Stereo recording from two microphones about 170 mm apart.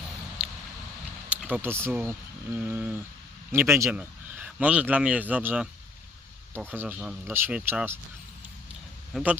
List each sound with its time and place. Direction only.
1.3 s speech: 5° right (ahead or behind)
6.7 s speech: 10° right (ahead or behind)
9.1 s speech: 10° right (ahead or behind)